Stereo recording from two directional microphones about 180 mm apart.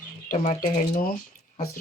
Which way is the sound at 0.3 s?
45° left (ahead or behind).